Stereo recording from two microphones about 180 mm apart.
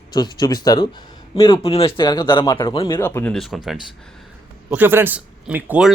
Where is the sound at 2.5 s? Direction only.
15° left (ahead or behind).